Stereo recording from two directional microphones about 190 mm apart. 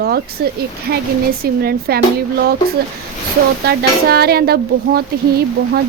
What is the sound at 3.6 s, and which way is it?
Speech, 55° right (ahead or behind).